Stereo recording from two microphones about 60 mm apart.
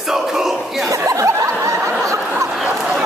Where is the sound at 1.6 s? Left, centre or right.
Right.